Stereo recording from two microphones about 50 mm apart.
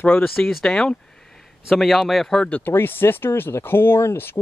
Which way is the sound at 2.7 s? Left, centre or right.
Left.